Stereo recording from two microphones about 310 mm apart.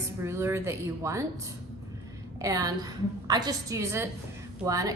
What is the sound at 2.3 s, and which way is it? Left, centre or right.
A woman's voice, centre.